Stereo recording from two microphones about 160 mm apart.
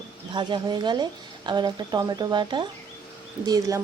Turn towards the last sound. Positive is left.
turn(degrees=-20)  # may be behind; listen again after turning